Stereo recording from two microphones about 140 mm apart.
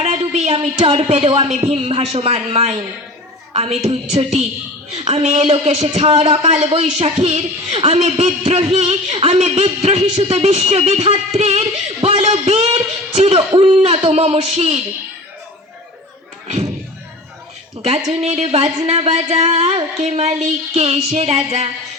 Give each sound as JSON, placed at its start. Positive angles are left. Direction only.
{"t": 0.0, "sound": "speech", "side_deg": -50}
{"t": 17.8, "sound": "speech", "side_deg": -50}